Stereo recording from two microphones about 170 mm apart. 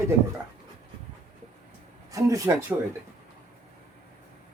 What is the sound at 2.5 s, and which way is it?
Speech, 20° right (ahead or behind).